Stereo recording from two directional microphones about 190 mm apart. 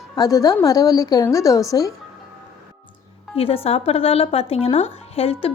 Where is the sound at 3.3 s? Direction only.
30° left (ahead or behind).